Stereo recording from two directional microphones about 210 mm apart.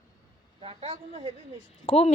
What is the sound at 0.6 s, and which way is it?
Speech, 25° right (ahead or behind).